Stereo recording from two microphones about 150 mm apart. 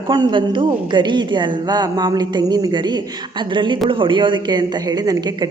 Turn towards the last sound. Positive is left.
turn(degrees=-25)  # may be behind; listen again after turning